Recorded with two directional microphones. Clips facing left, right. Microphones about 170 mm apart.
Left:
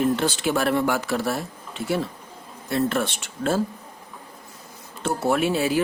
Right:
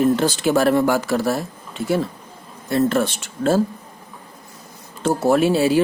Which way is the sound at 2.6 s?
40° right (ahead or behind).